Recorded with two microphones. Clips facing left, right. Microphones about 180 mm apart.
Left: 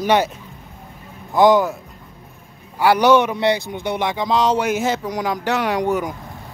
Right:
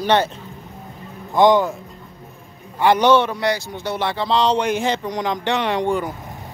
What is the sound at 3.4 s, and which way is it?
Speech, 25° left (ahead or behind).